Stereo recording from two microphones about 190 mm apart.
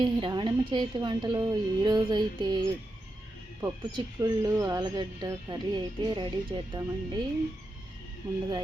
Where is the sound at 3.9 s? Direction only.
20° right (ahead or behind).